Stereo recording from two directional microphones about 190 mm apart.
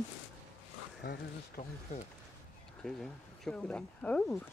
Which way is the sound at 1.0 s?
50° left (ahead or behind).